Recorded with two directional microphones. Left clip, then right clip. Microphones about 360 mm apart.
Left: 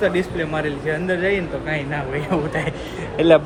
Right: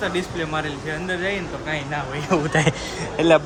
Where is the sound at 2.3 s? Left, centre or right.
Right.